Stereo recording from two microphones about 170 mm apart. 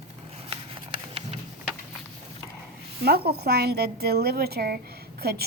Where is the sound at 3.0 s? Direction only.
65° right (ahead or behind).